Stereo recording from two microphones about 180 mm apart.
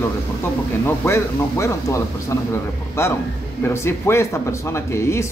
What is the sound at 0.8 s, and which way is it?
Speech, 15° left (ahead or behind).